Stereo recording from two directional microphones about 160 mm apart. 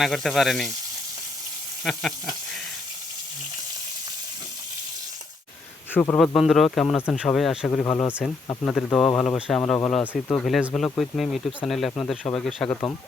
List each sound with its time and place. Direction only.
0.0 s speech: centre (ahead or behind)
1.8 s speech: centre (ahead or behind)
5.9 s speech: 10° left (ahead or behind)
7.7 s speech: 10° left (ahead or behind)